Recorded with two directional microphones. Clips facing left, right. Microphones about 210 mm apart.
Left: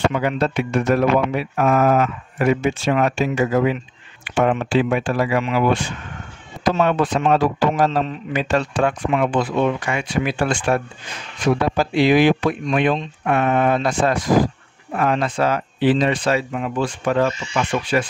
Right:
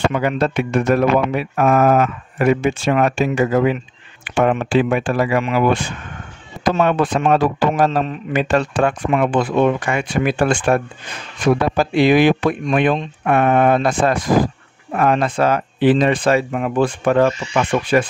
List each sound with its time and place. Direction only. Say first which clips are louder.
0.1 s a man's voice: right 2 dB; 55° right (ahead or behind)